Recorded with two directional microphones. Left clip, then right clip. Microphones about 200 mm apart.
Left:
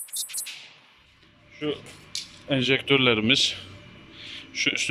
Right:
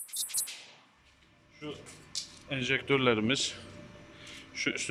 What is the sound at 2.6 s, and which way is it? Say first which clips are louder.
Speech: left 7 dB; 20° left (ahead or behind).